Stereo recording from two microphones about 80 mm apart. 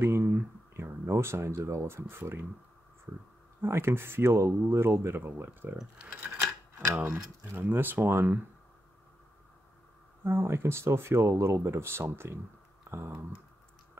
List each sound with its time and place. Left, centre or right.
0.0 s a sound: right
3.6 s speech: right
5.9 s speech: centre
7.5 s speech: right
10.2 s speech: right